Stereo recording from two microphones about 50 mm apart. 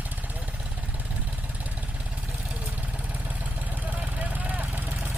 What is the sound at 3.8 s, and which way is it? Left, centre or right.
Vehicle, right.